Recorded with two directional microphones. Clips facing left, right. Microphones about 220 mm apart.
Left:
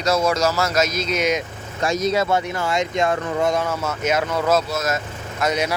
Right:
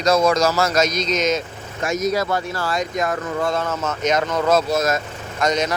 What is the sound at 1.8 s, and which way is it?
A man's voice, 30° left (ahead or behind).